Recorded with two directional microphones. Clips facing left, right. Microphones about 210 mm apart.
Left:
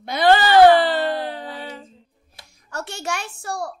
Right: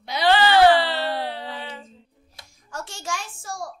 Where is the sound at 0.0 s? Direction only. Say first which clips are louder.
Left 3 dB; 50° left (ahead or behind).